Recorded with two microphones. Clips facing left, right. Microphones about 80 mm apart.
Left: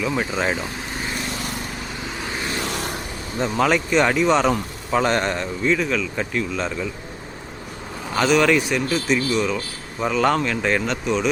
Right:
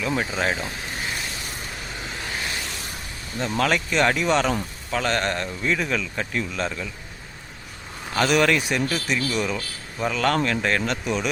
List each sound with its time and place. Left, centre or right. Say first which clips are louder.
0.0 s speech: left 2 dB; centre
2.6 s a sound: left 7 dB; left
3.4 s speech: left 3 dB; centre
4.9 s speech: left 4 dB; centre
5.7 s speech: left 2 dB; centre
6.1 s speech: left 3 dB; centre
8.2 s speech: left 3 dB; centre
10.0 s speech: left 3 dB; centre
11.0 s speech: left 4 dB; centre